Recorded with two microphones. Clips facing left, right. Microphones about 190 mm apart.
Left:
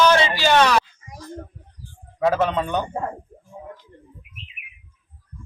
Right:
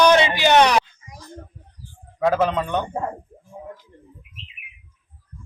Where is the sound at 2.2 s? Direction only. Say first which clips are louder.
Even; centre (ahead or behind).